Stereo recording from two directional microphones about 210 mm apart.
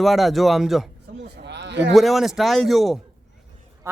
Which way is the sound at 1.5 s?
55° right (ahead or behind).